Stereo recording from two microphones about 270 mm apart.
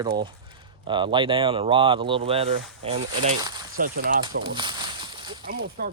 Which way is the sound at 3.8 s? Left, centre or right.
Right.